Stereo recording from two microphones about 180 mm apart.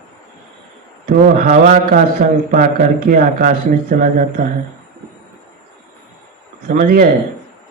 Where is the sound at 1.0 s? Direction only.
50° right (ahead or behind).